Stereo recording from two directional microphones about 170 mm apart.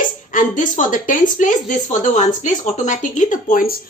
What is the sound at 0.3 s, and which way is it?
A woman's voice, 50° left (ahead or behind).